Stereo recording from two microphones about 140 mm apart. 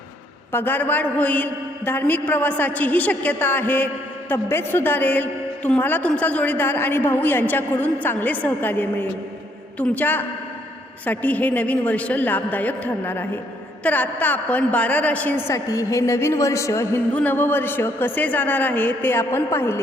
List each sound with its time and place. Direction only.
0.5 s a woman's voice: 15° left (ahead or behind)